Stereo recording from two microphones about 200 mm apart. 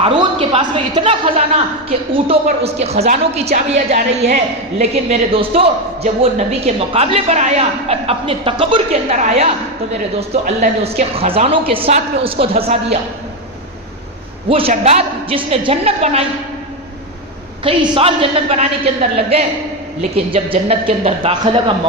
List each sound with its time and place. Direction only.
0.2 s a woman's voice: 25° right (ahead or behind)
14.5 s a man's voice: 30° right (ahead or behind)
17.6 s a woman's voice: 25° right (ahead or behind)